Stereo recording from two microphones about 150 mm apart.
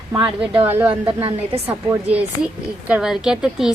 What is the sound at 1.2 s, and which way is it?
Speech, 40° right (ahead or behind).